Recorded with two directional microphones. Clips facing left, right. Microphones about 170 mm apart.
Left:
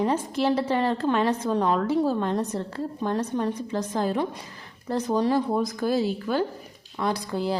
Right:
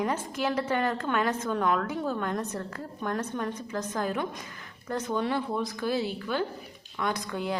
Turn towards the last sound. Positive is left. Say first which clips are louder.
# left 4 dB
turn(degrees=35)  # may be behind; listen again after turning